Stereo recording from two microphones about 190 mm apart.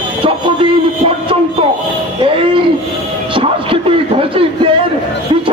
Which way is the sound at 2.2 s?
30° right (ahead or behind).